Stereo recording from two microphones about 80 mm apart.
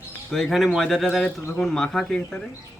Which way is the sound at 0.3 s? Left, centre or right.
Centre.